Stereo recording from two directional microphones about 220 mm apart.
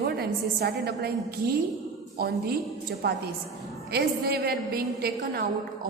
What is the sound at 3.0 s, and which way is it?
A woman's voice, 45° right (ahead or behind).